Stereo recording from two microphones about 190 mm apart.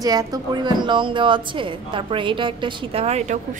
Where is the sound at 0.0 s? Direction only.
20° right (ahead or behind).